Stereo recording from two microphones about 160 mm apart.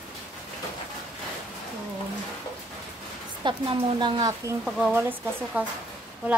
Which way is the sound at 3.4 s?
30° right (ahead or behind).